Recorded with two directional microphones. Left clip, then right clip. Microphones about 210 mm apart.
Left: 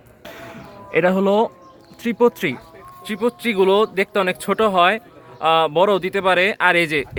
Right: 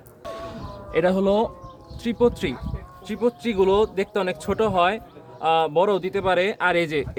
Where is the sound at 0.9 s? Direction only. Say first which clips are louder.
Left 3 dB; 25° left (ahead or behind).